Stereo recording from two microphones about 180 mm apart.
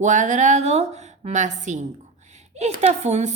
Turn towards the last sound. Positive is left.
turn(degrees=-40)  # may be behind; listen again after turning